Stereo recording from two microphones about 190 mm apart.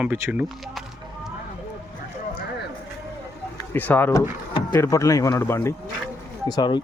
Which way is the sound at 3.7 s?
10° left (ahead or behind).